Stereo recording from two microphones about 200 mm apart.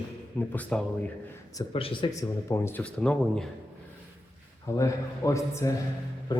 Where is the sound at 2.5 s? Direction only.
15° left (ahead or behind).